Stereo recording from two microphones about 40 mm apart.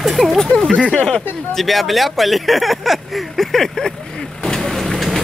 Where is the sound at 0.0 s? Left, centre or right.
Centre.